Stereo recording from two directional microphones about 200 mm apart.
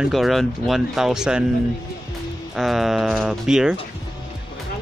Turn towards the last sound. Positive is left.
turn(degrees=-5)  # may be behind; listen again after turning